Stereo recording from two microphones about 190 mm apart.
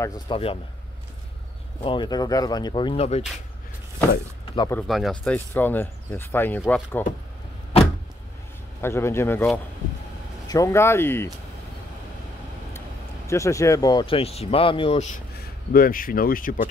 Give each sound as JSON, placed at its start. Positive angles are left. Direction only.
{"t": 0.3, "sound": "speech", "side_deg": 30}
{"t": 1.8, "sound": "speech", "side_deg": 25}
{"t": 4.6, "sound": "speech", "side_deg": 5}
{"t": 8.8, "sound": "speech", "side_deg": 15}
{"t": 10.5, "sound": "speech", "side_deg": 15}
{"t": 13.3, "sound": "speech", "side_deg": 15}
{"t": 15.7, "sound": "speech", "side_deg": 50}